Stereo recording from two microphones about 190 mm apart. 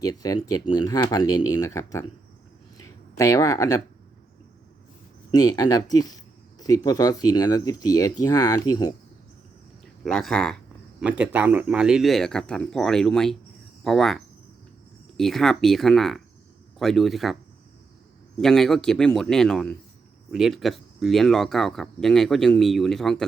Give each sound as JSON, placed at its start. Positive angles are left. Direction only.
{"t": 0.0, "sound": "speech", "side_deg": 20}
{"t": 2.7, "sound": "a sound", "side_deg": 15}
{"t": 5.3, "sound": "speech", "side_deg": 20}
{"t": 10.0, "sound": "speech", "side_deg": 0}
{"t": 15.2, "sound": "speech", "side_deg": 0}
{"t": 18.3, "sound": "speech", "side_deg": 0}